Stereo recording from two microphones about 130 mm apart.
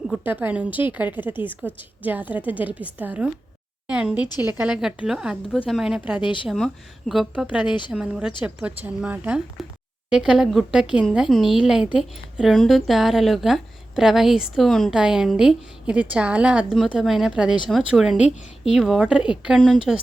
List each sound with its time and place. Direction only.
0.3 s a woman's voice: 10° right (ahead or behind)
6.2 s speech: 40° left (ahead or behind)
7.1 s a woman's voice: 5° right (ahead or behind)
9.6 s a sound: centre (ahead or behind)
10.1 s a woman's voice: 5° right (ahead or behind)